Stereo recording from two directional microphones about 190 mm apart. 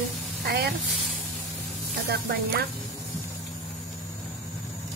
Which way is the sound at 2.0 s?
55° right (ahead or behind).